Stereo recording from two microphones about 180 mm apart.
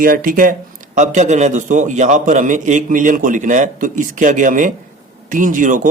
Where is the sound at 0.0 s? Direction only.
50° right (ahead or behind).